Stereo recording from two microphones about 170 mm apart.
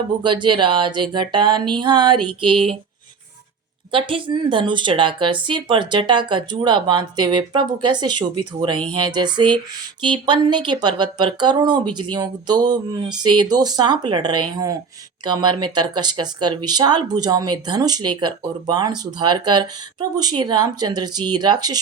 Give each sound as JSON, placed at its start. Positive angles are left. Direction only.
{"t": 0.2, "sound": "speech", "side_deg": -25}
{"t": 3.9, "sound": "speech", "side_deg": -30}